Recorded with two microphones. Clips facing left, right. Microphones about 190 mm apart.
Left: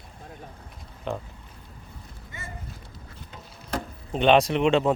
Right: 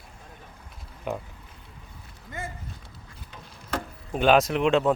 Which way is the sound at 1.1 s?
10° right (ahead or behind).